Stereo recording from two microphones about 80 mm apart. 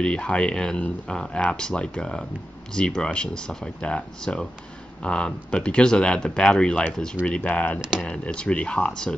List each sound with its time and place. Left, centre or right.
0.0 s speech: centre